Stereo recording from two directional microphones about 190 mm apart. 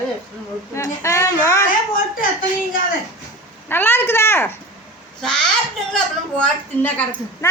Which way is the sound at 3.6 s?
10° left (ahead or behind).